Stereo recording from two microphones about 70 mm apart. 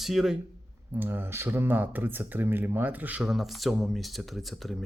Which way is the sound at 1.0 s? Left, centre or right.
Right.